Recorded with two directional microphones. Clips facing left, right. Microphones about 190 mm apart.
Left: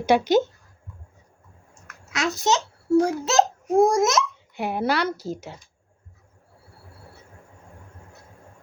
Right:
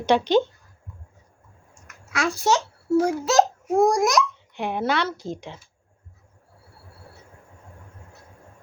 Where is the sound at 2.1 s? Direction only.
20° left (ahead or behind).